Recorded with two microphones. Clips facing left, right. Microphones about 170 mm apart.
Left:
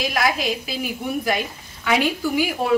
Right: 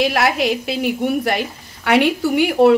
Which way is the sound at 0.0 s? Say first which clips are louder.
Right 5 dB; 70° right (ahead or behind).